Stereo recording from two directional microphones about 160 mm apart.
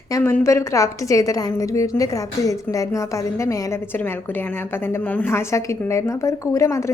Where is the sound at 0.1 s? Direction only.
15° left (ahead or behind).